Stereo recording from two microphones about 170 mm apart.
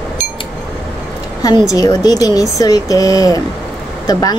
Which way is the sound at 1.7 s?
20° left (ahead or behind).